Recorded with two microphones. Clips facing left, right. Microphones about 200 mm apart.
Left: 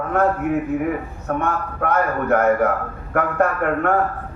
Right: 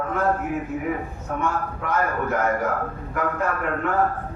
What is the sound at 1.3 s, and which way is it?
A man's voice, 60° left (ahead or behind).